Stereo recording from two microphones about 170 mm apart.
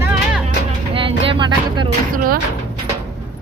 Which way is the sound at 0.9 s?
30° right (ahead or behind).